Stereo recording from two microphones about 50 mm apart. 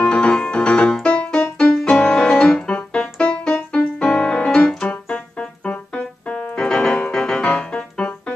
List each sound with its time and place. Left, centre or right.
0.0 s music: left
1.0 s keyboard: centre
5.7 s music: left